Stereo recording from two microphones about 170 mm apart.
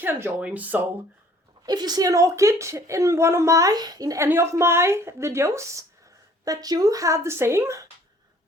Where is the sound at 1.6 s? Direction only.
25° right (ahead or behind).